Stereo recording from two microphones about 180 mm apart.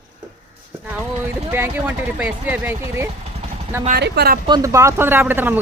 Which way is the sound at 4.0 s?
60° right (ahead or behind).